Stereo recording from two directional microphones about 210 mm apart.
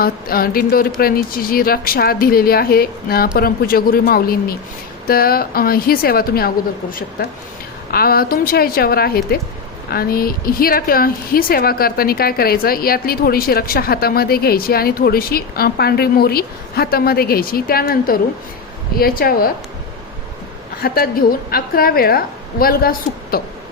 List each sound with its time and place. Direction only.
0.0 s a woman's voice: 45° left (ahead or behind)
20.8 s a woman's voice: 45° left (ahead or behind)